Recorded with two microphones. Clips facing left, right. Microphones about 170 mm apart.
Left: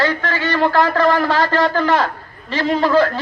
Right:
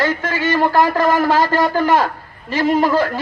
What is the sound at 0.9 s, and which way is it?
Speech, 45° right (ahead or behind).